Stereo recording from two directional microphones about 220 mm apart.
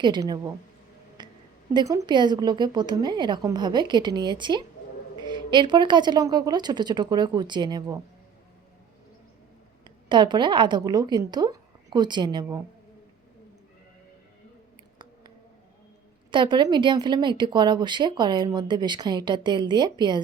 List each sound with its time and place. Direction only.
0.0 s a woman's voice: 20° right (ahead or behind)
1.2 s a sound: 20° right (ahead or behind)
1.7 s speech: 15° right (ahead or behind)
9.8 s a woman's voice: 20° right (ahead or behind)
16.3 s speech: 20° right (ahead or behind)